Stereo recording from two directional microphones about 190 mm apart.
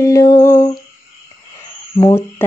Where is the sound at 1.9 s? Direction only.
15° left (ahead or behind).